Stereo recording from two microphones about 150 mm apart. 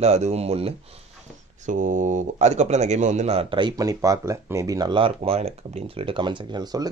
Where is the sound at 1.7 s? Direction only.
55° right (ahead or behind); by 6.9 s 25° right (ahead or behind).